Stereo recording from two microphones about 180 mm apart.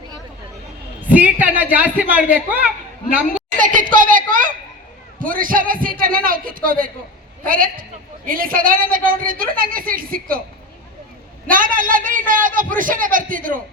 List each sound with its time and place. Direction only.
1.1 s speech: 10° right (ahead or behind)
3.6 s a sound: 50° right (ahead or behind)
5.2 s a woman's voice: 50° right (ahead or behind)
11.5 s a woman's voice: 50° right (ahead or behind)